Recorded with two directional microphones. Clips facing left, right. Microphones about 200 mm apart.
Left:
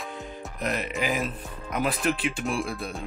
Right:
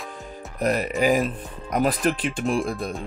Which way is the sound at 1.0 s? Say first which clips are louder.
Right 11 dB; 40° right (ahead or behind).